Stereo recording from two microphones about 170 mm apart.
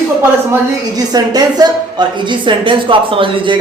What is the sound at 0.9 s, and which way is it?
A man's voice, 25° right (ahead or behind).